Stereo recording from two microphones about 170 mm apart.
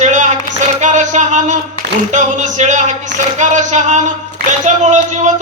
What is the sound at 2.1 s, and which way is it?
Speech, 45° right (ahead or behind).